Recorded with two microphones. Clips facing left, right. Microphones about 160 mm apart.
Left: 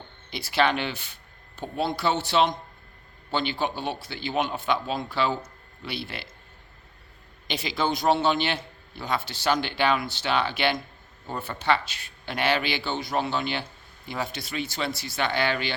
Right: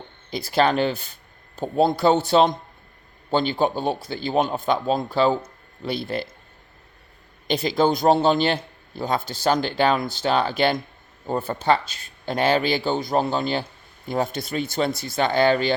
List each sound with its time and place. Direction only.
0.3 s speech: 40° right (ahead or behind)
7.4 s speech: 45° right (ahead or behind)